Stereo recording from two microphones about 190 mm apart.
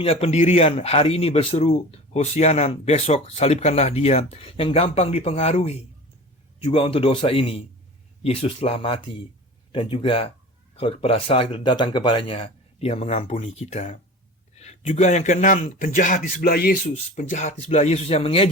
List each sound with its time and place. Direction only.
0.0 s a man's voice: 30° left (ahead or behind); by 17.0 s 50° left (ahead or behind)
17.2 s speech: 40° left (ahead or behind)